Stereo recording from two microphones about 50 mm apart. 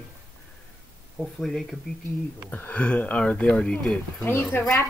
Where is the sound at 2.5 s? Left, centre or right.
Left.